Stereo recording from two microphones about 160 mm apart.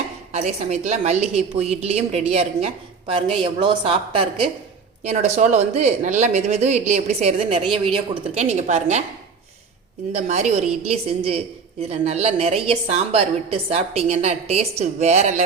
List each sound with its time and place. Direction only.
0.3 s a woman's voice: 45° right (ahead or behind)
10.2 s a woman's voice: 45° right (ahead or behind)